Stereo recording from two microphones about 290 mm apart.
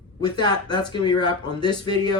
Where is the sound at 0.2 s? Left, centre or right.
Centre.